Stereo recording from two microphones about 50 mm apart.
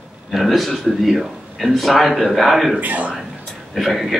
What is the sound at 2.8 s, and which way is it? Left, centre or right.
Speech, right.